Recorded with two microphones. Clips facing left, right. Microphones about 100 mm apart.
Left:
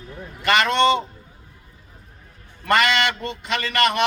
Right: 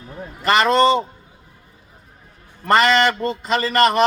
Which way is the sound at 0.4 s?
35° right (ahead or behind).